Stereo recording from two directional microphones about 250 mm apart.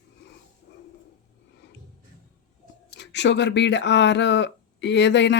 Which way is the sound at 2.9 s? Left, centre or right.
Left.